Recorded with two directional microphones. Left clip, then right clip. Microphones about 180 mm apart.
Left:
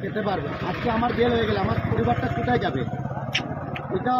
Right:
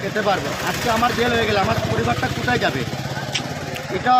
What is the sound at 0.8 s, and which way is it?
Speech, 50° right (ahead or behind).